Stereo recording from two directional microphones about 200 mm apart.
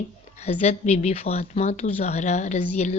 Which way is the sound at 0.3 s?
35° left (ahead or behind).